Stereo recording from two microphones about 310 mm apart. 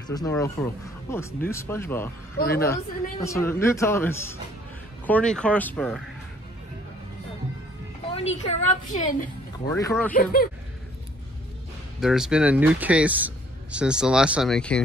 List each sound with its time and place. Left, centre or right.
0.0 s speech: centre
2.3 s a man's voice: left
3.3 s speech: centre
8.1 s a woman's voice: centre
9.8 s speech: centre
10.1 s a woman's voice: left
12.0 s speech: centre